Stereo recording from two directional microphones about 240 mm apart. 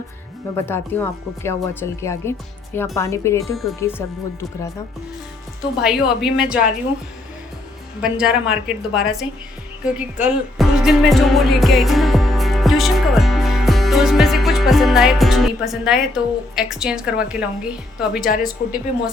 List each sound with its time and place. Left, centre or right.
0.5 s speech: centre
3.4 s a woman's voice: centre
5.8 s a woman's voice: centre
8.0 s a woman's voice: centre
18.3 s a woman's voice: left